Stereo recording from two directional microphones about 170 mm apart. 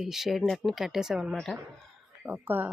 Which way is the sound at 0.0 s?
Centre (ahead or behind).